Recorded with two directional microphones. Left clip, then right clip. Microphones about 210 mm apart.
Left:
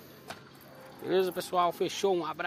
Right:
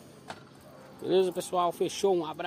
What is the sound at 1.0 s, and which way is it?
Speech, 20° right (ahead or behind).